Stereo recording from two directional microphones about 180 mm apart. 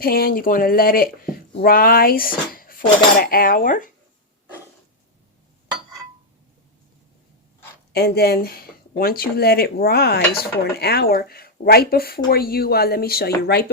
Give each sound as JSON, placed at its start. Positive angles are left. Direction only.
{"t": 0.0, "sound": "speech", "side_deg": 55}
{"t": 3.2, "sound": "cutlery", "side_deg": 55}
{"t": 7.9, "sound": "speech", "side_deg": 65}